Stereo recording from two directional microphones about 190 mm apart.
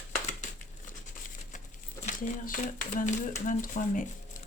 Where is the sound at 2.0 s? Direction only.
45° left (ahead or behind).